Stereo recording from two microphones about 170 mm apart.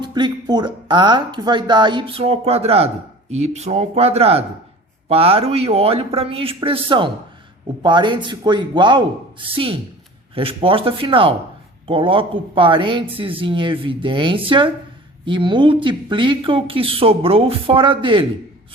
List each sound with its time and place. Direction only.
0.0 s speech: 25° right (ahead or behind)